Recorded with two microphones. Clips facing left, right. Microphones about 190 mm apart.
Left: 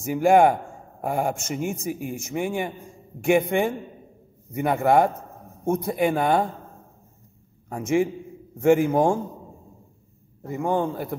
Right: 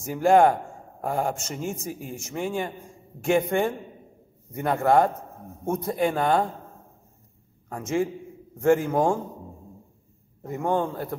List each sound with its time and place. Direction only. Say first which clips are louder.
0.0 s a man's voice: left 1 dB; 10° left (ahead or behind)
7.7 s a man's voice: left 4 dB; 15° left (ahead or behind)
10.4 s a man's voice: left 1 dB; centre (ahead or behind)